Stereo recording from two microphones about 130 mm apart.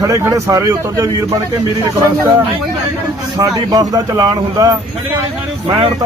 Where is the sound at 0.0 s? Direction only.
25° right (ahead or behind).